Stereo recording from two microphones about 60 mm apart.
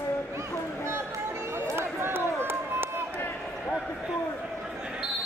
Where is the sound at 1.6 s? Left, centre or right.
Right.